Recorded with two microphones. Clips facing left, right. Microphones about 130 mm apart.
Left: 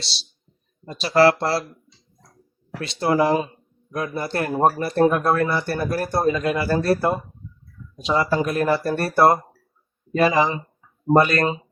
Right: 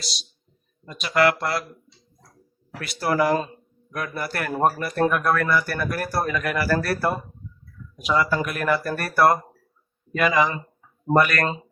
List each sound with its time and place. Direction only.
0.0 s speech: 30° left (ahead or behind)
2.8 s speech: 25° left (ahead or behind)